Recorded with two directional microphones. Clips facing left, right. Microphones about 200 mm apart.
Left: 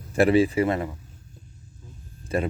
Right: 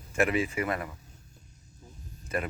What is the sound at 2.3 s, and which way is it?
Speech, 30° left (ahead or behind).